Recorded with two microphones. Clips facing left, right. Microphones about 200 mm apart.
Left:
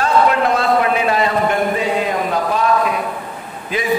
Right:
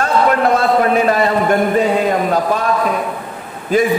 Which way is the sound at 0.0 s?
45° right (ahead or behind).